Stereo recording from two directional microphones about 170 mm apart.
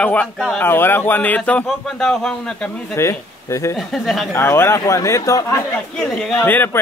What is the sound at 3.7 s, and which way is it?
Speech, centre (ahead or behind).